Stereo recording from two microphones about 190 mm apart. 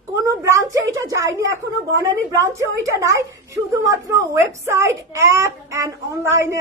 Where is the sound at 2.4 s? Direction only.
15° right (ahead or behind).